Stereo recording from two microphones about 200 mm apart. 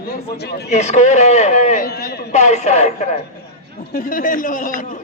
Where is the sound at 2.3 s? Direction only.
35° left (ahead or behind).